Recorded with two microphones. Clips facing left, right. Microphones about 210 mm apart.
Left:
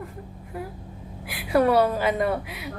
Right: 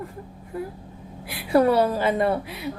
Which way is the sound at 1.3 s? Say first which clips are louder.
Right 2 dB; 30° right (ahead or behind).